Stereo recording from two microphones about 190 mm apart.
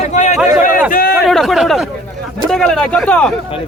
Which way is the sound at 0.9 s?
50° left (ahead or behind).